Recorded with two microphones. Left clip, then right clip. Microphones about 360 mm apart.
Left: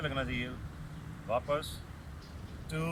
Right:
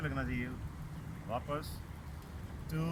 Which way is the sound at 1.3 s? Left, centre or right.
Centre.